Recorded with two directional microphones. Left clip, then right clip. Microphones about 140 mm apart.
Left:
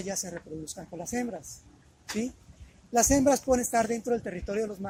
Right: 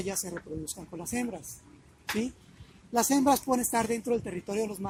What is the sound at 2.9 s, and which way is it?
Speech, 40° left (ahead or behind).